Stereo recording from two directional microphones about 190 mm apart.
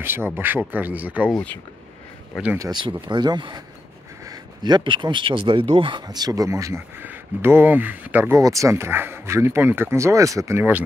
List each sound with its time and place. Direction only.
0.0 s speech: 10° right (ahead or behind)
2.6 s speech: 25° right (ahead or behind)